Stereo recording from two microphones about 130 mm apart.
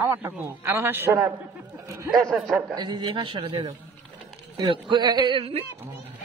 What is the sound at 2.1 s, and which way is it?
Speech, centre (ahead or behind).